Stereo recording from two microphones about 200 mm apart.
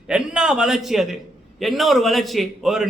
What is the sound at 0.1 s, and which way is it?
A man's voice, 5° right (ahead or behind).